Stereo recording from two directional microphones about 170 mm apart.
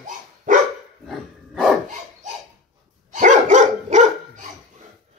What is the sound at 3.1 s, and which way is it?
Dog, 45° right (ahead or behind).